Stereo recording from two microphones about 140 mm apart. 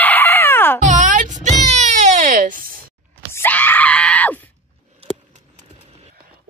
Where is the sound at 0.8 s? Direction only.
65° right (ahead or behind); by 2.9 s 90° right.